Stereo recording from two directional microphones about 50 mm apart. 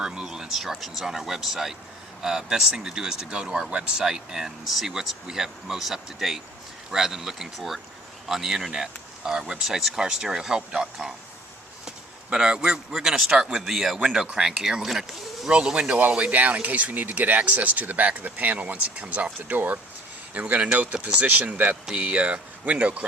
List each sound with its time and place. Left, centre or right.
0.0 s speech: centre
11.9 s a sound: centre
12.9 s speech: centre; by 19.8 s right
20.3 s speech: right